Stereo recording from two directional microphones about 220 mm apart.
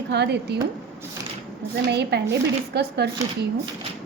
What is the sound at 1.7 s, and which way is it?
A woman's voice, 50° right (ahead or behind).